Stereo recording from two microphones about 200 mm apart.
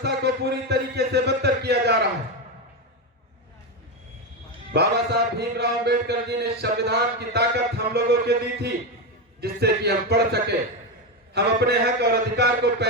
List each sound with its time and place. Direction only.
0.0 s a man's voice: 55° right (ahead or behind)
4.7 s a man's voice: 55° right (ahead or behind)